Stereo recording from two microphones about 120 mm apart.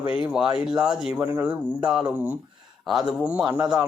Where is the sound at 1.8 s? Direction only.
5° right (ahead or behind).